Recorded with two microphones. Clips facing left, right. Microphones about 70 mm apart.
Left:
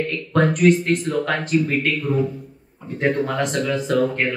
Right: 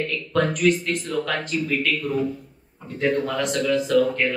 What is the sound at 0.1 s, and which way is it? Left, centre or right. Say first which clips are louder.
Speech: left 3 dB; left.